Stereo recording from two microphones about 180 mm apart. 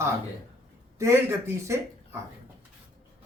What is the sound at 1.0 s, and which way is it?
Speech, 15° right (ahead or behind).